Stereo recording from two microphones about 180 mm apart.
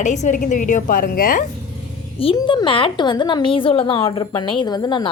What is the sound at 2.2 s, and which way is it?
A woman's voice, 30° left (ahead or behind).